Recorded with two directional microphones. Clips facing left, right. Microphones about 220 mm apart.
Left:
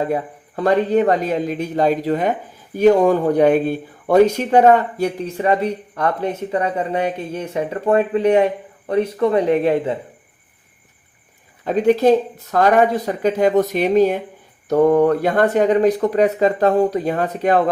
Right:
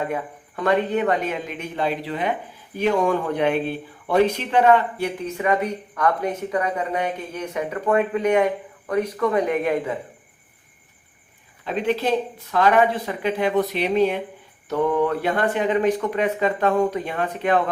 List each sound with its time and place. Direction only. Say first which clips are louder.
0.0 s speech: left 5 dB; 35° left (ahead or behind)
11.6 s speech: left 8 dB; 45° left (ahead or behind)